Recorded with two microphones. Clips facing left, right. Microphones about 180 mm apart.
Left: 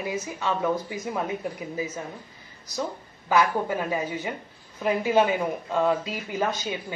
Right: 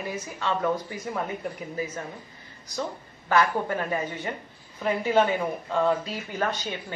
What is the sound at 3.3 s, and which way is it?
Speech, 10° left (ahead or behind).